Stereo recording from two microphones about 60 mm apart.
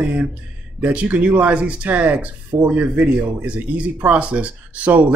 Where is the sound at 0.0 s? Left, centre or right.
Right.